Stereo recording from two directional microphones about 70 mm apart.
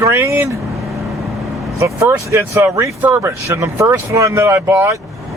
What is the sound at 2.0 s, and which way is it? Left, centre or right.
Speech, right.